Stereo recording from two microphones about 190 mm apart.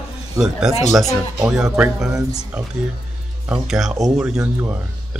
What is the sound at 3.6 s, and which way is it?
Speech, centre (ahead or behind).